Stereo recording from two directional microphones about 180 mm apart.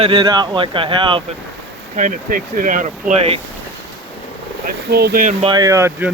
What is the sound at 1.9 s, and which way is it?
Speech, 45° right (ahead or behind).